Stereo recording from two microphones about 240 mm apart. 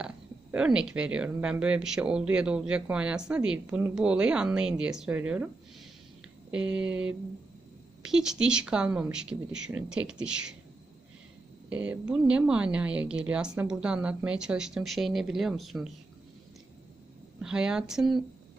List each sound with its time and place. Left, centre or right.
0.5 s speech: centre
6.5 s speech: centre
11.7 s speech: centre
17.4 s speech: centre